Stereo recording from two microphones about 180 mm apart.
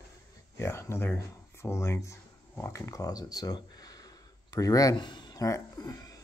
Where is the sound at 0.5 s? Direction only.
15° left (ahead or behind).